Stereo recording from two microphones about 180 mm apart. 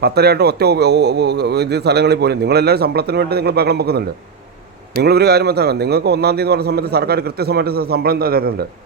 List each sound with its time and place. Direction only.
0.0 s a man's voice: 65° right (ahead or behind)
5.0 s a man's voice: 65° right (ahead or behind)